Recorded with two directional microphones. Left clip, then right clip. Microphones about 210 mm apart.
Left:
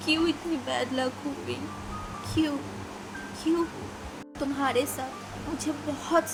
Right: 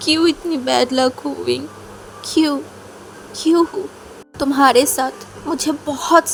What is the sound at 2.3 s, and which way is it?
A woman's voice, 45° right (ahead or behind).